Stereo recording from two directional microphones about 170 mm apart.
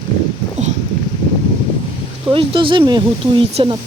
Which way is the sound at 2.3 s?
30° right (ahead or behind).